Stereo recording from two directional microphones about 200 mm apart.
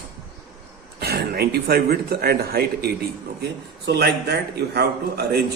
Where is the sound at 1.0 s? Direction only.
50° right (ahead or behind).